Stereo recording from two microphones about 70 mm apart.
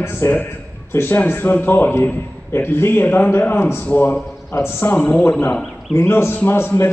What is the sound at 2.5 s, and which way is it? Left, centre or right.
A man's voice, left.